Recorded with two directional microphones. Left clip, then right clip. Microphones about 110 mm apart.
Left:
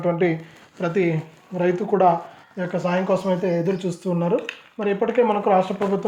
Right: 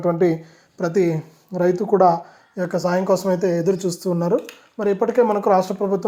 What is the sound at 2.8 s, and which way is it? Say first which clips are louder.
Speech: right 2 dB; 30° right (ahead or behind).